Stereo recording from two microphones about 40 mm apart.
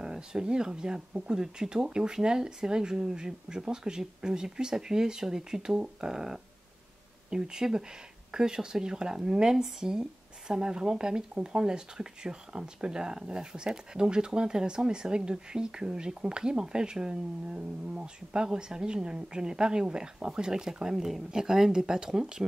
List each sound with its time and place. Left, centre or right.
0.0 s speech: centre